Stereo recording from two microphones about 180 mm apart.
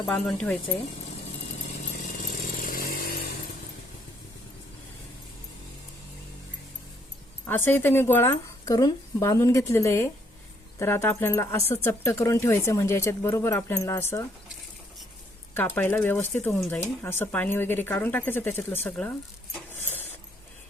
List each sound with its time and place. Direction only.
0.1 s speech: 5° left (ahead or behind)
1.9 s chainsaw: 45° left (ahead or behind)
7.4 s speech: 10° left (ahead or behind)
15.5 s speech: 10° left (ahead or behind)
19.5 s mechanisms: 10° left (ahead or behind)